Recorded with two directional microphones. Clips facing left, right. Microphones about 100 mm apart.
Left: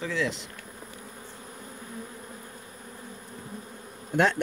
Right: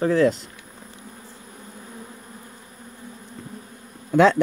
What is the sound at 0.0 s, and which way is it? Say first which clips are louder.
Speech: right 11 dB; 45° right (ahead or behind).